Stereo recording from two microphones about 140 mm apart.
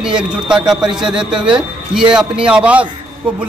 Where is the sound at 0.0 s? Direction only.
5° right (ahead or behind).